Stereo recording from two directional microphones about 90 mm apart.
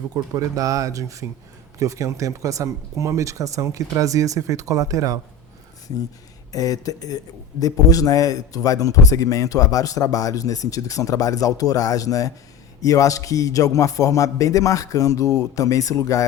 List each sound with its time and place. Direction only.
0.1 s speech: 40° right (ahead or behind)
6.5 s a man's voice: 40° left (ahead or behind)